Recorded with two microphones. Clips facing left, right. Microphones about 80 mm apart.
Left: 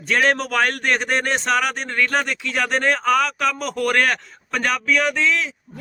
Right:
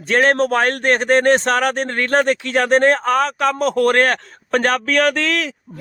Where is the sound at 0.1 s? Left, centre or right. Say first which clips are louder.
Right 4 dB; right.